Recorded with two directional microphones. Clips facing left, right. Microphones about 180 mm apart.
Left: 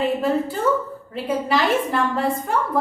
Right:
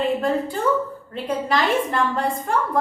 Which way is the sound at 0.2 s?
5° left (ahead or behind).